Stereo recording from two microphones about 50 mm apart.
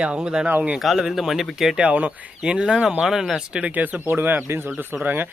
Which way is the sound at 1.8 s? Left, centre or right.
Right.